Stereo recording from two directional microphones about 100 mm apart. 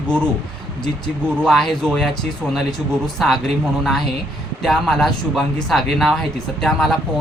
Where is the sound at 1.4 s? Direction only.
5° left (ahead or behind).